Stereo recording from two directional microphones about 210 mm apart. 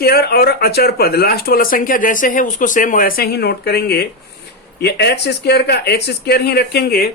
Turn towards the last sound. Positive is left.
turn(degrees=50)  # may be behind; listen again after turning